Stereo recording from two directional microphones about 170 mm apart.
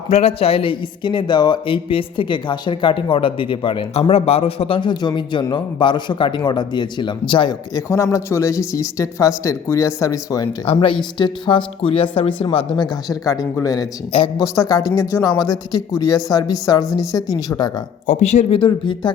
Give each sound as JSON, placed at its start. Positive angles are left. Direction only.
{"t": 0.1, "sound": "speech", "side_deg": 35}
{"t": 10.7, "sound": "speech", "side_deg": 30}
{"t": 18.0, "sound": "speech", "side_deg": 45}